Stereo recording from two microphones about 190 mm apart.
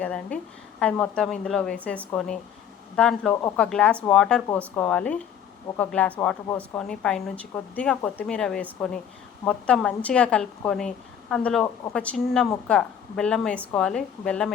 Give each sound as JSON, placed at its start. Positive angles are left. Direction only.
{"t": 0.0, "sound": "a woman's voice", "side_deg": 5}